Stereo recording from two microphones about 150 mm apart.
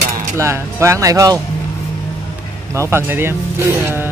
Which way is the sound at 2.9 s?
15° right (ahead or behind).